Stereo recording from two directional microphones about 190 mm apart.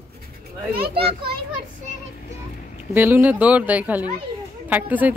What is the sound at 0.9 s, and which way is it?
Speech, 30° right (ahead or behind).